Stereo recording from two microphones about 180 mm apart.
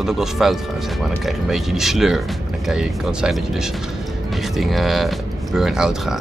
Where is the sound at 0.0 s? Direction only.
Centre (ahead or behind).